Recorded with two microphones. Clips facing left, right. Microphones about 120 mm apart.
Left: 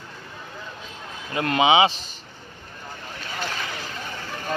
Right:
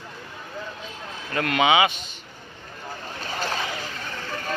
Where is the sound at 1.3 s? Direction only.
25° left (ahead or behind).